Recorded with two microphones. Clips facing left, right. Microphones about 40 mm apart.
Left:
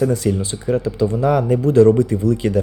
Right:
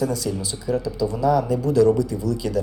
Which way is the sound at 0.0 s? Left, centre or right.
Left.